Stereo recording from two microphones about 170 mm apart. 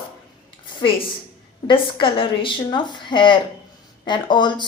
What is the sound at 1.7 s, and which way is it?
A woman's voice, 30° left (ahead or behind).